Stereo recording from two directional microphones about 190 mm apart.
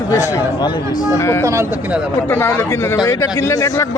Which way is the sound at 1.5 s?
15° right (ahead or behind).